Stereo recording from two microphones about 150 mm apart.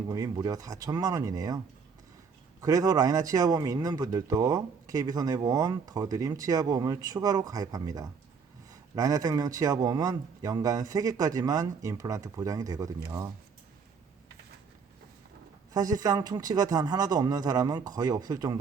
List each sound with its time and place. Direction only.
0.1 s speech: 25° right (ahead or behind)
15.7 s speech: 25° right (ahead or behind)